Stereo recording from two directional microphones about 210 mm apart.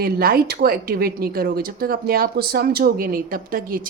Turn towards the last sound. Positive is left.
turn(degrees=-40)  # may be behind; listen again after turning